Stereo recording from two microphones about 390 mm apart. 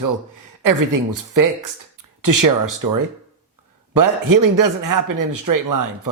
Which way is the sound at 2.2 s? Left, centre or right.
Right.